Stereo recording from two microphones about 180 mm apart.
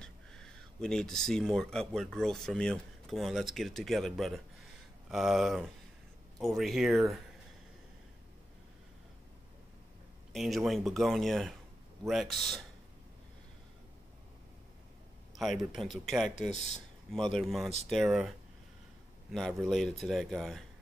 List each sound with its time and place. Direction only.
0.0 s speech: 5° left (ahead or behind)
10.3 s speech: centre (ahead or behind)
15.3 s speech: centre (ahead or behind)
19.6 s speech: centre (ahead or behind)